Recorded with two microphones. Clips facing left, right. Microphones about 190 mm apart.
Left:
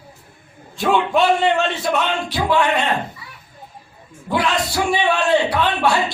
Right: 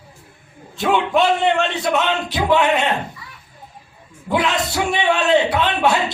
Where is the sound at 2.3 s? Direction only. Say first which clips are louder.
Right 1 dB; 20° right (ahead or behind).